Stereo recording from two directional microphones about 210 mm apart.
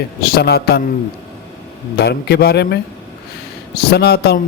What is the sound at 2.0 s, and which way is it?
Speech, 50° left (ahead or behind).